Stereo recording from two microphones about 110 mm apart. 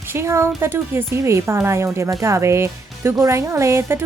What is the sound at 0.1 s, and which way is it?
Speech, 25° right (ahead or behind).